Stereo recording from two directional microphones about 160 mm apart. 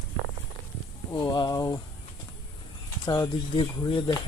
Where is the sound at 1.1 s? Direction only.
25° left (ahead or behind).